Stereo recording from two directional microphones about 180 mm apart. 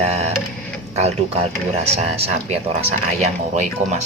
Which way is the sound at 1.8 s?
35° right (ahead or behind).